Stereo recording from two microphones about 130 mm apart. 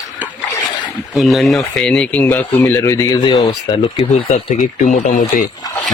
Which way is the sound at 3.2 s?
35° left (ahead or behind).